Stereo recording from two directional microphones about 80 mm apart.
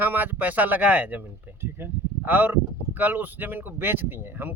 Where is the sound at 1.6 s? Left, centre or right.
Right.